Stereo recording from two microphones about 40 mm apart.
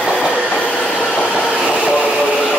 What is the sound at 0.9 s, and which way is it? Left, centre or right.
Train, left.